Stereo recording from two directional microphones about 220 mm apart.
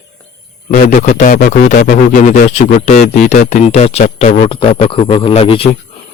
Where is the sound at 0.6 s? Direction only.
35° left (ahead or behind).